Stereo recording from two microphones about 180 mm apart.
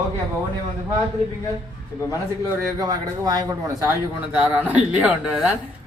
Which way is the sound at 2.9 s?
20° right (ahead or behind).